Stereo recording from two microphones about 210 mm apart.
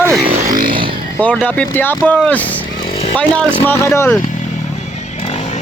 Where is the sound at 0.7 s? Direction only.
25° right (ahead or behind).